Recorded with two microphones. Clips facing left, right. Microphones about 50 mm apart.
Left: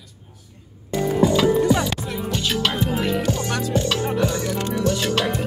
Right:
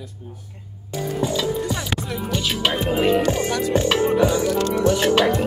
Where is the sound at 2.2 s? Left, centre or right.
Centre.